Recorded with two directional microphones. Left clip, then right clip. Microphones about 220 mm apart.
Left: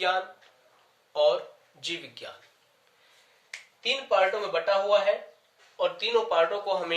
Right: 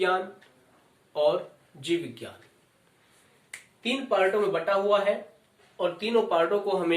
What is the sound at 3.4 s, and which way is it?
Speech, 10° left (ahead or behind).